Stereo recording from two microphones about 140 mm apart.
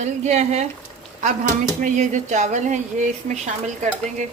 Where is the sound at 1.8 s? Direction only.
60° right (ahead or behind).